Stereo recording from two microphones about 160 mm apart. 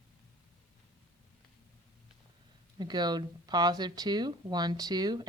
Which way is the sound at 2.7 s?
25° right (ahead or behind).